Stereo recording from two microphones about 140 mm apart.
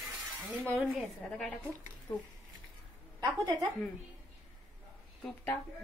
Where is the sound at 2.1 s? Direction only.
30° left (ahead or behind).